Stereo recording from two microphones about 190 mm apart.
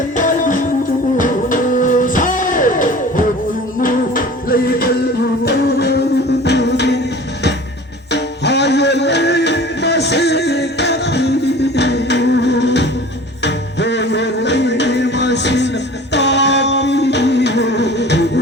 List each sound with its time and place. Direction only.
0.2 s music: 40° left (ahead or behind); by 7.0 s 65° left (ahead or behind)
8.1 s music: 65° left (ahead or behind)
16.1 s a sound: 65° left (ahead or behind)